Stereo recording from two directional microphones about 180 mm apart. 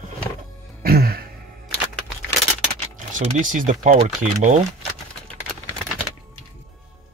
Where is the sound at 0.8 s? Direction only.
55° right (ahead or behind).